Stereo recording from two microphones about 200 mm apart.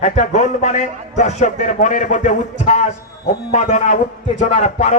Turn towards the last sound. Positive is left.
turn(degrees=35)  # may be behind; listen again after turning